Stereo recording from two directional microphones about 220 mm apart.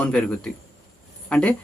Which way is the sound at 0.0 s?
5° left (ahead or behind).